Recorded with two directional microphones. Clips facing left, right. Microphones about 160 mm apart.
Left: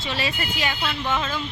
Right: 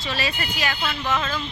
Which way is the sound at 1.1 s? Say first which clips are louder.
Right 2 dB; 10° left (ahead or behind).